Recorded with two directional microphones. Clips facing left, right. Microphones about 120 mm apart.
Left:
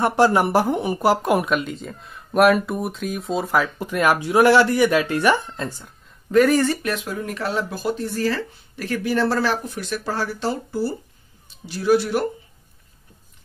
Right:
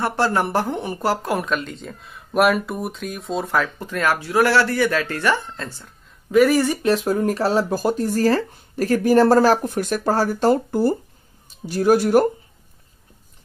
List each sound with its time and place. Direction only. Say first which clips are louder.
0.0 s speech: left 3 dB; 15° left (ahead or behind)
1.5 s speech: left 2 dB; 5° left (ahead or behind)
6.3 s speech: right 1 dB; 5° right (ahead or behind)
6.8 s speech: right 7 dB; 35° right (ahead or behind)